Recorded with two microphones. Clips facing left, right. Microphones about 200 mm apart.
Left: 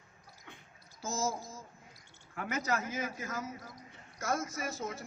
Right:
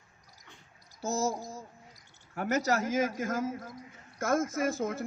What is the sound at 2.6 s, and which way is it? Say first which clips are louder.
Speech: right 5 dB; 85° right.